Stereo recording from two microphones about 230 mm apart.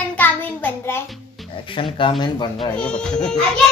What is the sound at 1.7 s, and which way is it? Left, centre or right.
Speech, left.